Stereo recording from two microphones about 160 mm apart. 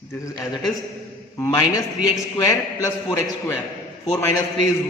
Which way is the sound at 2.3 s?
20° left (ahead or behind).